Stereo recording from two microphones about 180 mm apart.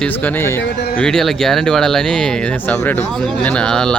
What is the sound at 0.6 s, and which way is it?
Speech, 65° left (ahead or behind).